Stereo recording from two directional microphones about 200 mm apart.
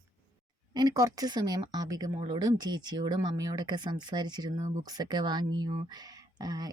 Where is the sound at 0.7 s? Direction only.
20° right (ahead or behind).